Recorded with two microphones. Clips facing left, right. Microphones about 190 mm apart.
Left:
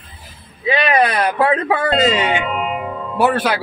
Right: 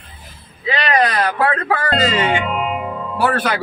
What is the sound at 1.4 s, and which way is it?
Speech, 20° left (ahead or behind).